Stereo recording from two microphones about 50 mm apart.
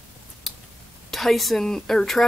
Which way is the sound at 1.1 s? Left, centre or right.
Centre.